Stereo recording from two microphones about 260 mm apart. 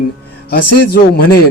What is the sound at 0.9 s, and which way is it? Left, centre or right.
Speech, left.